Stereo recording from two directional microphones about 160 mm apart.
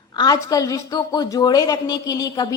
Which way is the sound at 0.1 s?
25° left (ahead or behind).